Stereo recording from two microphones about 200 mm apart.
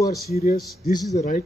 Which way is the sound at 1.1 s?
40° left (ahead or behind).